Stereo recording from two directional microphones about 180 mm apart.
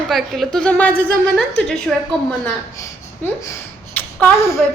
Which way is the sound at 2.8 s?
15° left (ahead or behind).